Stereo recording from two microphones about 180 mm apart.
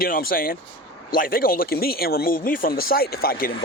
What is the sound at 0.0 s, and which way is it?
A man's voice, 55° left (ahead or behind).